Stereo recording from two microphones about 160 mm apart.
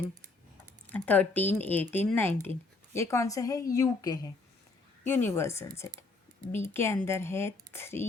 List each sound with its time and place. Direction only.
0.9 s speech: 10° left (ahead or behind)